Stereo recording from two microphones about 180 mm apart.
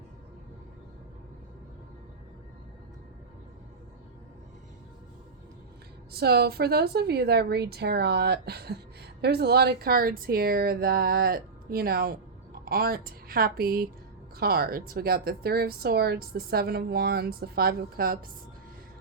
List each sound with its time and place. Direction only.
6.1 s speech: 65° right (ahead or behind)